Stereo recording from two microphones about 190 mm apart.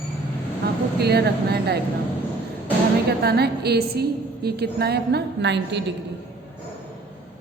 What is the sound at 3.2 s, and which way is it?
A woman's voice, 55° right (ahead or behind).